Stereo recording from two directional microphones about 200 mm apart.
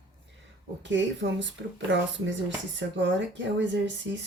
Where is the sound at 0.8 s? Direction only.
65° right (ahead or behind).